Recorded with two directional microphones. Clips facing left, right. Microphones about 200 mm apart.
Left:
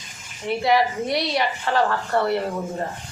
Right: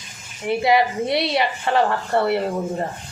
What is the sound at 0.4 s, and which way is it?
Speech, 25° right (ahead or behind).